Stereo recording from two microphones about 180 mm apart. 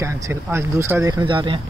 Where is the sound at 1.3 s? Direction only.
30° right (ahead or behind).